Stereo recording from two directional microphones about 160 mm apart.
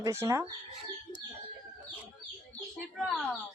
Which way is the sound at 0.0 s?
20° right (ahead or behind).